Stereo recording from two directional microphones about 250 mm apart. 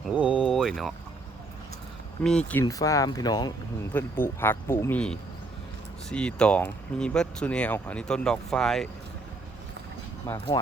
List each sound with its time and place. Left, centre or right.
0.1 s a sound: centre
2.5 s speech: centre
10.2 s speech: centre